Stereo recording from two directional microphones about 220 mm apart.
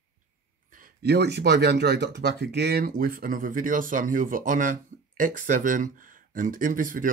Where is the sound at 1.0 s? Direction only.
50° right (ahead or behind).